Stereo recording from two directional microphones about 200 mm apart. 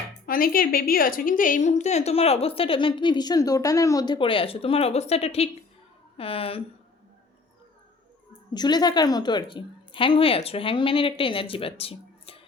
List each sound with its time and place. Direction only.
0.3 s a woman's voice: 45° left (ahead or behind); by 6.6 s 30° left (ahead or behind)
8.5 s a woman's voice: 20° left (ahead or behind)